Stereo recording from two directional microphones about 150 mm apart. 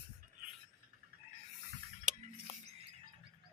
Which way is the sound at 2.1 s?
55° right (ahead or behind).